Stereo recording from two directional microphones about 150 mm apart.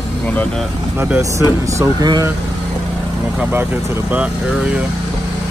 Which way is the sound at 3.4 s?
15° right (ahead or behind).